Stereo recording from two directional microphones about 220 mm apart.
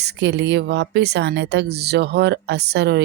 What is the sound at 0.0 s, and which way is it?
Speech, 50° right (ahead or behind).